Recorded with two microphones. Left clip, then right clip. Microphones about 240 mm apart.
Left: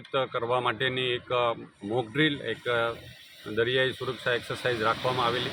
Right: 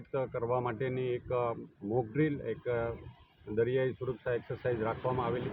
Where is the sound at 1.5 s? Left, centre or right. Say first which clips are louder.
Left 4 dB; left.